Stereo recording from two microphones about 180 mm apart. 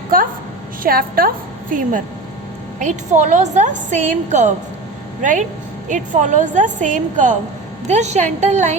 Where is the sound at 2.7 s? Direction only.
40° right (ahead or behind).